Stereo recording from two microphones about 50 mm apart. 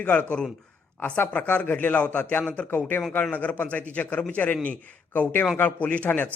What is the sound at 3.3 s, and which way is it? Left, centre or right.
A man's voice, left.